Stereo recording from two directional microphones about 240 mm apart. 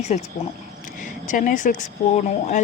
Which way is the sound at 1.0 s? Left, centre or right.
Left.